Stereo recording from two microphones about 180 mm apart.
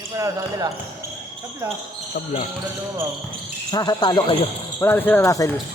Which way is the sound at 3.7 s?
20° left (ahead or behind).